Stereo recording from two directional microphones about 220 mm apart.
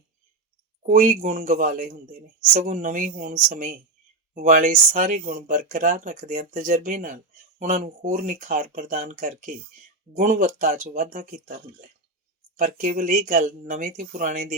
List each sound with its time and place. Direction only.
0.8 s speech: 35° right (ahead or behind)